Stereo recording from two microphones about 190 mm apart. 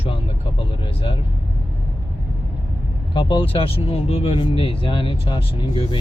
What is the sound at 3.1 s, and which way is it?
Speech, 30° left (ahead or behind).